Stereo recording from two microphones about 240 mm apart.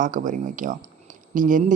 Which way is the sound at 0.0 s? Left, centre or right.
Right.